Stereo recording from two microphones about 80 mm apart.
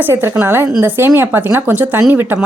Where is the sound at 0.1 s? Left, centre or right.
Right.